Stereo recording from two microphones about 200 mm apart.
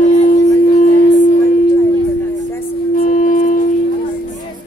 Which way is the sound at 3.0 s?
40° left (ahead or behind).